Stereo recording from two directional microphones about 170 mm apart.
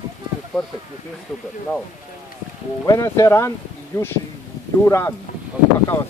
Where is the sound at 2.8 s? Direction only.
20° left (ahead or behind).